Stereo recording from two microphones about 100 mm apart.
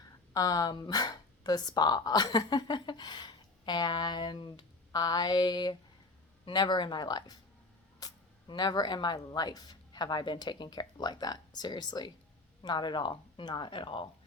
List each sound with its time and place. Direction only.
0.3 s speech: 40° left (ahead or behind)